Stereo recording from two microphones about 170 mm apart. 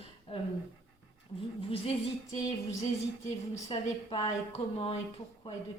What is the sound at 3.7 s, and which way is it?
Speech, 30° left (ahead or behind).